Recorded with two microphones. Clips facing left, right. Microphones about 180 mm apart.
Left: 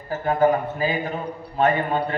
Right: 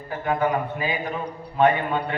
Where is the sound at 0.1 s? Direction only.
35° left (ahead or behind).